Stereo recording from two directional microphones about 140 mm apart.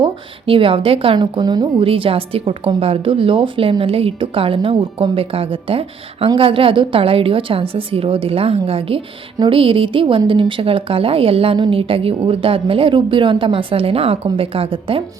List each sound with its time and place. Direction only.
0.0 s a woman's voice: 40° right (ahead or behind)